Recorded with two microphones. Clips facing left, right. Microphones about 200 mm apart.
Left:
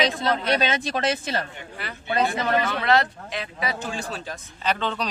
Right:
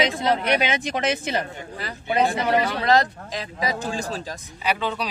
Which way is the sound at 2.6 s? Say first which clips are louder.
Right 2 dB; 35° right (ahead or behind).